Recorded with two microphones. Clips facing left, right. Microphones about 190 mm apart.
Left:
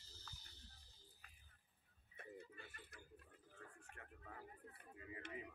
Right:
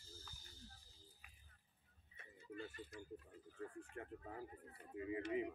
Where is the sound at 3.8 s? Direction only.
30° right (ahead or behind).